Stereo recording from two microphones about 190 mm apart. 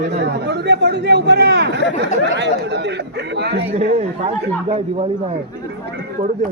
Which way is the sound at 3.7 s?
35° right (ahead or behind).